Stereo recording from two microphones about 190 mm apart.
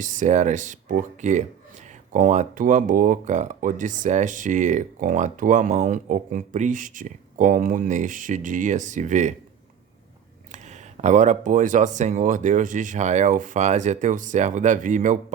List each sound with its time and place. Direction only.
0.0 s speech: 40° right (ahead or behind)
10.5 s speech: 40° right (ahead or behind)